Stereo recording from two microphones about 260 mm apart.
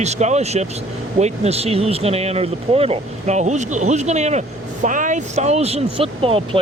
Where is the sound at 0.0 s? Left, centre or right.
Right.